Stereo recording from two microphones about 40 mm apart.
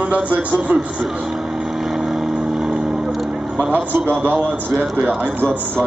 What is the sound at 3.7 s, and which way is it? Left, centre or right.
A man's voice, right.